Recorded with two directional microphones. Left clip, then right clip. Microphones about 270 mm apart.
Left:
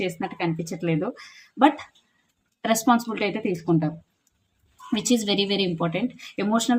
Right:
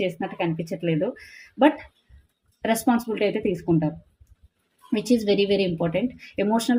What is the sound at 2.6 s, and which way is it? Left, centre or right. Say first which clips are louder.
Speech: left 2 dB; centre.